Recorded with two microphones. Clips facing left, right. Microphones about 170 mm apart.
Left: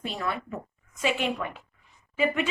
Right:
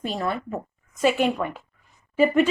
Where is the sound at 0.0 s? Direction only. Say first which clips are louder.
Right 5 dB; 40° right (ahead or behind).